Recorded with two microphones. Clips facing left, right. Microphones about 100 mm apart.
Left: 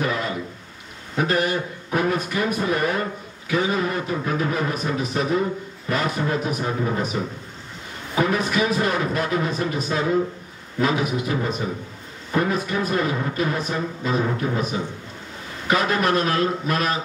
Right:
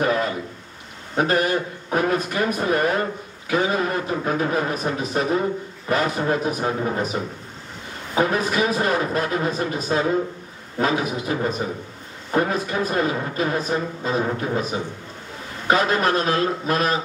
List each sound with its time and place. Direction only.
0.0 s a sound: 40° right (ahead or behind)
1.1 s a man's voice: 35° right (ahead or behind)
8.2 s speech: 35° right (ahead or behind)